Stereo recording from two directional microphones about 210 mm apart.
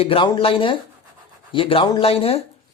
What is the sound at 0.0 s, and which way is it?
Speech, 25° left (ahead or behind).